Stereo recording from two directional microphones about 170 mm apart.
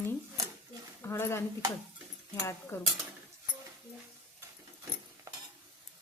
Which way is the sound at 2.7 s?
15° left (ahead or behind).